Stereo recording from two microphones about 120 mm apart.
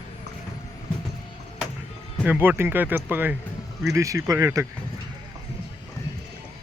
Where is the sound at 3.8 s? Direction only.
25° right (ahead or behind).